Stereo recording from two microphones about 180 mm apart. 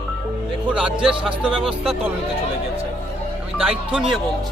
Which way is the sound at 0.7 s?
5° right (ahead or behind).